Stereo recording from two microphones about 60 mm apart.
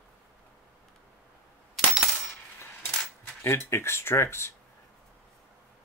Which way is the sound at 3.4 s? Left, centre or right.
Left.